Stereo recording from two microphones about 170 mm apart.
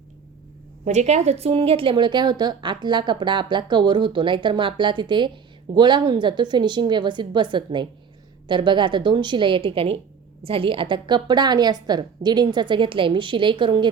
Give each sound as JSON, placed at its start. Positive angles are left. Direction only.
{"t": 0.9, "sound": "speech", "side_deg": -40}